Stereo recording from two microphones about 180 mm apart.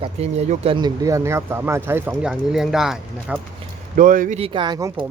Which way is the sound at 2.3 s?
Centre (ahead or behind).